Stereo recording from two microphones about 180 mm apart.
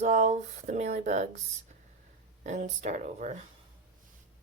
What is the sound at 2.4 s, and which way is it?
Speech, 40° right (ahead or behind).